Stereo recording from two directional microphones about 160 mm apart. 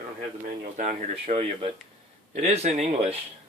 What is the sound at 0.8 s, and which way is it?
Speech, 50° right (ahead or behind).